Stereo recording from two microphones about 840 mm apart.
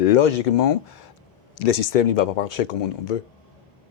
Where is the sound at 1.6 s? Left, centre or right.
Left.